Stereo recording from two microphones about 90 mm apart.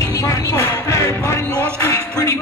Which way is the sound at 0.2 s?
35° left (ahead or behind).